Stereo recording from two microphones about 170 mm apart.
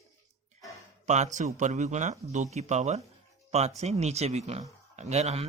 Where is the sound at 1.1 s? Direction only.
45° right (ahead or behind).